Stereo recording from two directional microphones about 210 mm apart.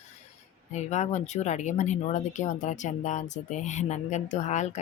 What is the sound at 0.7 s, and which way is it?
Speech, 35° left (ahead or behind).